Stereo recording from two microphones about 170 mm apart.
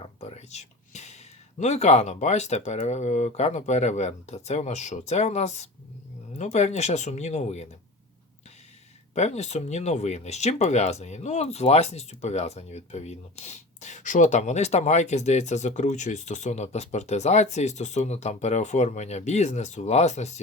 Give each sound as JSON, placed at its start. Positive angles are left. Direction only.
{"t": 0.0, "sound": "speech", "side_deg": 40}
{"t": 9.1, "sound": "speech", "side_deg": 40}